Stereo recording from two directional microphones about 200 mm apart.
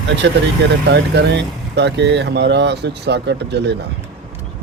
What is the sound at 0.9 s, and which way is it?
Speech, 60° right (ahead or behind).